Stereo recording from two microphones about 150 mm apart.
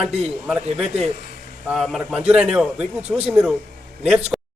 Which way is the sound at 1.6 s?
Centre (ahead or behind).